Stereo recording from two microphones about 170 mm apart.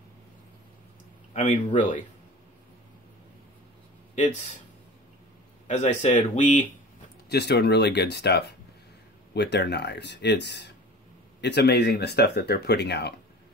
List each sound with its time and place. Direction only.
1.3 s speech: 45° left (ahead or behind)
5.7 s speech: 45° left (ahead or behind)
7.2 s speech: 80° left